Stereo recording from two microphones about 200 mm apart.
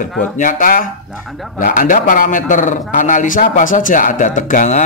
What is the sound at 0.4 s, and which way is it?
Speech, 40° left (ahead or behind).